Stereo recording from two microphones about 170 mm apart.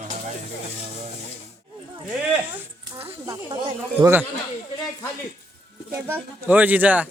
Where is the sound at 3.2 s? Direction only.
15° right (ahead or behind).